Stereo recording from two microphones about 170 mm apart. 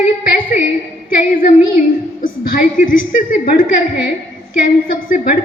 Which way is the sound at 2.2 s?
55° left (ahead or behind).